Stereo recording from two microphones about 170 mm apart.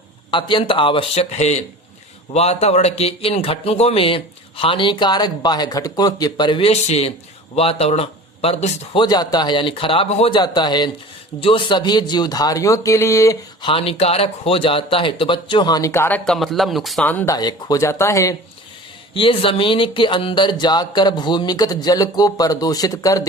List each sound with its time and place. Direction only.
0.3 s speech: 30° left (ahead or behind)
13.7 s speech: 35° left (ahead or behind); by 17.3 s 10° left (ahead or behind)
17.3 s speech: 20° left (ahead or behind)
19.1 s speech: 30° left (ahead or behind)